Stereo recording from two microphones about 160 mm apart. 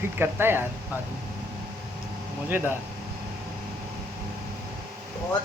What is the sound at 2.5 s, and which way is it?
Speech, 15° right (ahead or behind).